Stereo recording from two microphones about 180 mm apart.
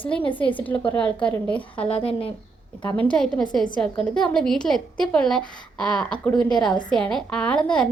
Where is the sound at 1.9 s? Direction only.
30° left (ahead or behind).